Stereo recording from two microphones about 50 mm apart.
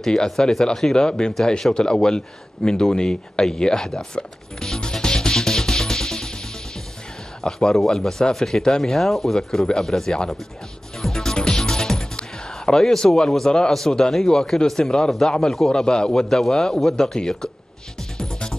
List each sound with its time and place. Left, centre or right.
0.0 s speech: centre
7.4 s speech: centre
11.0 s music: centre
13.5 s speech: centre
18.1 s music: centre